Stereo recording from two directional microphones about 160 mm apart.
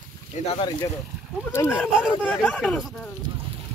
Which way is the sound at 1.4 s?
10° left (ahead or behind).